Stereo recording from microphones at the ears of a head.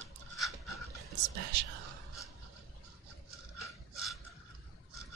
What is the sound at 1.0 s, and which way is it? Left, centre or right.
Whispering, right.